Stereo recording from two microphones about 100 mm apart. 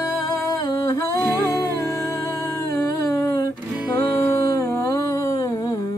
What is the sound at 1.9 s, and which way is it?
Humming, 30° left (ahead or behind).